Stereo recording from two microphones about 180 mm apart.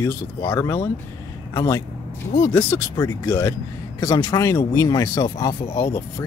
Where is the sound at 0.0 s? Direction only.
15° left (ahead or behind).